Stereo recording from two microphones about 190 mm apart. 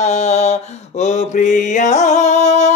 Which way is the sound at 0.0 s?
35° left (ahead or behind).